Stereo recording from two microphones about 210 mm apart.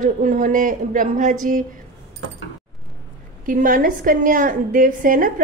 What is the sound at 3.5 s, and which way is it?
A woman's voice, 40° right (ahead or behind).